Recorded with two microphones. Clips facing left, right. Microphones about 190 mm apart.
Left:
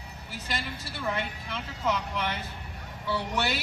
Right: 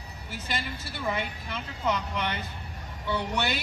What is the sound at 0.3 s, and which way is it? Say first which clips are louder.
Speech: right 1 dB; centre (ahead or behind).